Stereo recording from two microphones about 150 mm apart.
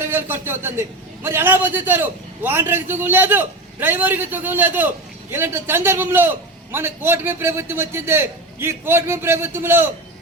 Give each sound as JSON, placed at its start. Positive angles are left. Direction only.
{"t": 0.0, "sound": "a man's voice", "side_deg": -15}